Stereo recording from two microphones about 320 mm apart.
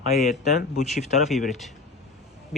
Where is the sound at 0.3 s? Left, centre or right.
Left.